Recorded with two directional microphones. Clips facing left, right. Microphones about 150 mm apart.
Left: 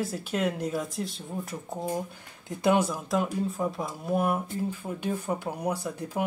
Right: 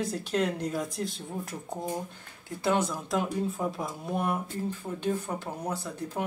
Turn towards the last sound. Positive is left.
turn(degrees=10)  # may be behind; listen again after turning